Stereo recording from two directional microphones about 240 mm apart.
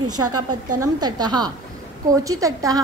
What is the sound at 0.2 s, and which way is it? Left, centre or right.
Speech, right.